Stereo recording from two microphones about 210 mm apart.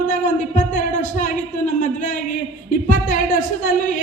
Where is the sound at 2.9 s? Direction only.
40° left (ahead or behind).